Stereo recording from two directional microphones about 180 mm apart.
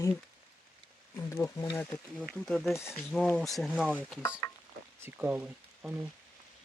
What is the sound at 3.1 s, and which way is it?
Speech, 5° left (ahead or behind).